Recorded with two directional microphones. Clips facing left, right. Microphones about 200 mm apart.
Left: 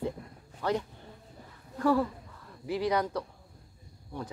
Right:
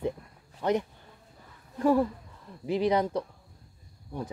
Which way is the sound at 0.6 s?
20° right (ahead or behind).